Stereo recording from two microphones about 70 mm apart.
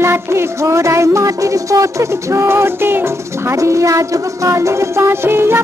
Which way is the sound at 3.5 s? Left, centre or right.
Right.